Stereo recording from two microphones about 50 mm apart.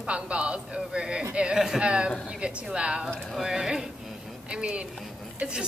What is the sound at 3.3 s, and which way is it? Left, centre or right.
A woman's voice, centre.